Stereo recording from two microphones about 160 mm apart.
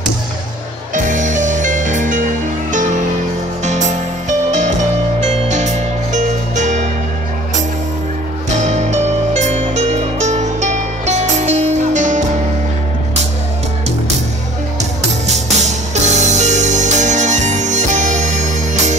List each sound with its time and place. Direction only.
0.9 s music: 50° right (ahead or behind)
8.5 s music: 45° right (ahead or behind)
14.8 s music: 45° right (ahead or behind)